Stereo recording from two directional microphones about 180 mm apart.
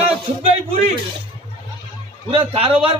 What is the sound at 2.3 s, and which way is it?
Speech, 30° right (ahead or behind).